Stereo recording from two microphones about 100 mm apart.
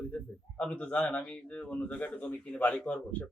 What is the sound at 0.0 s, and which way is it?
Speech, 15° left (ahead or behind).